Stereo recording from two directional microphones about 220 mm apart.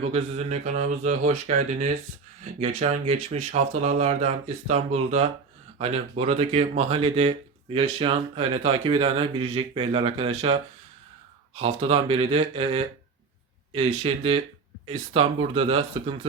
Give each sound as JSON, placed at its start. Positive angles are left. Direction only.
{"t": 0.1, "sound": "speech", "side_deg": -30}
{"t": 11.6, "sound": "speech", "side_deg": -25}